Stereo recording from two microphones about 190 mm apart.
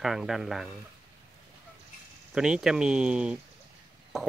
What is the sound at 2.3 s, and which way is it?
Speech, 5° right (ahead or behind).